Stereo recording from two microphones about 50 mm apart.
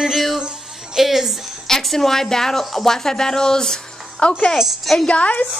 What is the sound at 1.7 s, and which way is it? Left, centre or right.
A woman's voice, centre.